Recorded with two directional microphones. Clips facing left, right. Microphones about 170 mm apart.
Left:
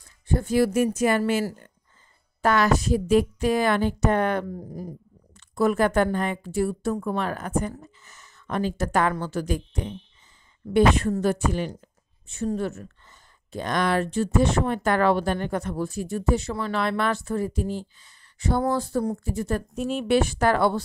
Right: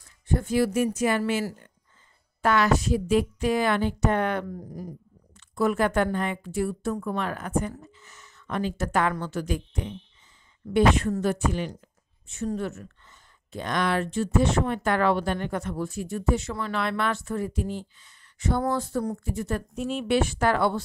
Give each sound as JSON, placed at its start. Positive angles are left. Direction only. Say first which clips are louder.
{"t": 0.3, "sound": "speech", "louder": "left 2 dB", "side_deg": 35}